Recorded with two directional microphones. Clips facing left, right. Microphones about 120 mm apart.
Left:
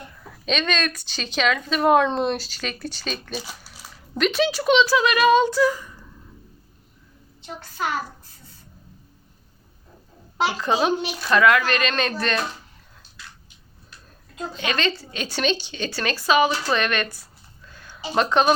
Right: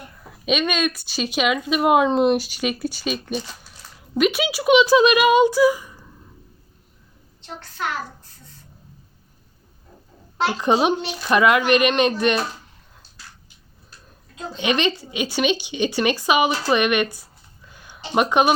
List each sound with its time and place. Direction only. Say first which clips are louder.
0.4 s speech: right 3 dB; 10° right (ahead or behind)
3.3 s a sound: right 4 dB; 10° left (ahead or behind)
4.2 s speech: right 1 dB; 10° right (ahead or behind)
10.6 s a child's voice: right 4 dB; 20° right (ahead or behind)
14.5 s speech: right 4 dB; 20° right (ahead or behind)
17.7 s a sound: even; 15° right (ahead or behind)
18.1 s speech: right 1 dB; 15° right (ahead or behind)